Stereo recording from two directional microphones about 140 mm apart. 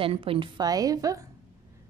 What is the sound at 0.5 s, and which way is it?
Speech, 25° right (ahead or behind).